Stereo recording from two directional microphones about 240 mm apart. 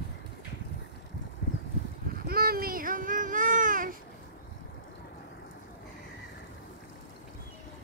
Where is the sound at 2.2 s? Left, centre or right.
Right.